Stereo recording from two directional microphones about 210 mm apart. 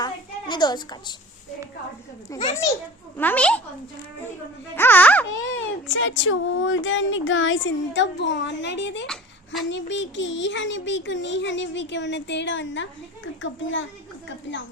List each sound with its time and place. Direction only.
0.0 s a sound: 20° left (ahead or behind)
3.2 s speech: 10° left (ahead or behind)
4.7 s speech: 10° left (ahead or behind)
5.4 s a child's voice: 65° left (ahead or behind)